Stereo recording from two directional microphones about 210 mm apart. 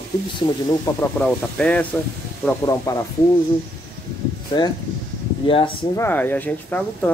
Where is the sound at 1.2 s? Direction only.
5° left (ahead or behind).